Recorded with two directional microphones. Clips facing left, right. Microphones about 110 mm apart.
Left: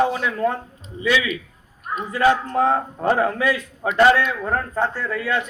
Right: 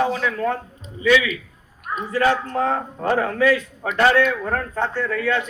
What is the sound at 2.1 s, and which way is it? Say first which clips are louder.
A man's voice: left 2 dB; 15° left (ahead or behind).